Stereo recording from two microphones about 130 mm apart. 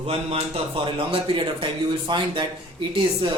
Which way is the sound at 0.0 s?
45° right (ahead or behind).